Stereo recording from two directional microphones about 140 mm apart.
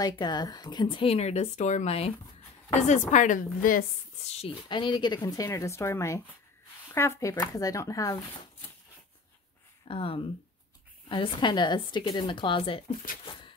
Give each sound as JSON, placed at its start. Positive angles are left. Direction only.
{"t": 0.0, "sound": "speech", "side_deg": 30}
{"t": 2.7, "sound": "a woman's voice", "side_deg": 60}
{"t": 4.2, "sound": "speech", "side_deg": 50}
{"t": 9.8, "sound": "speech", "side_deg": 40}
{"t": 13.2, "sound": "beatboxing", "side_deg": 35}